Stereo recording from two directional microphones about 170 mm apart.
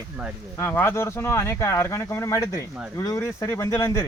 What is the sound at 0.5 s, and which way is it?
Speech, 15° left (ahead or behind).